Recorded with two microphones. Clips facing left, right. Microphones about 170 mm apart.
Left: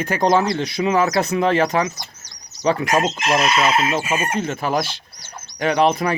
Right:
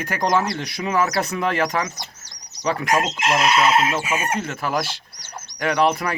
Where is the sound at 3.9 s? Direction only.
25° left (ahead or behind).